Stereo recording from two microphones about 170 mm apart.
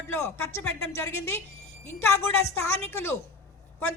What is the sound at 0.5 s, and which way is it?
A man's voice, 15° left (ahead or behind).